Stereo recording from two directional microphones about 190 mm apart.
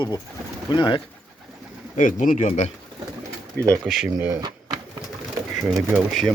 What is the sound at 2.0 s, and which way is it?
Speech, 45° left (ahead or behind).